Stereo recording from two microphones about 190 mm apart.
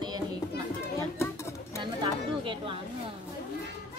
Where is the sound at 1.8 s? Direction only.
25° right (ahead or behind).